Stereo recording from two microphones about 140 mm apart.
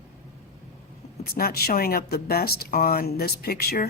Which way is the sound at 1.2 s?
90° left.